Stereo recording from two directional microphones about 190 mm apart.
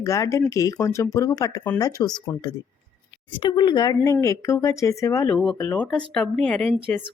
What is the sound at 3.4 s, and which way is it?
Speech, 20° left (ahead or behind).